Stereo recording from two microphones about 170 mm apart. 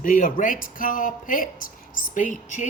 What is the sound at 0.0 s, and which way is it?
Speech, 50° left (ahead or behind).